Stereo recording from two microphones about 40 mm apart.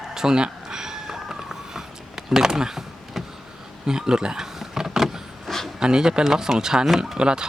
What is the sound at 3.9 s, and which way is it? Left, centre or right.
Speech, centre.